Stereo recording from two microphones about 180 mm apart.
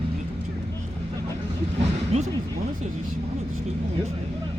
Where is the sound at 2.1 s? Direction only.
35° right (ahead or behind).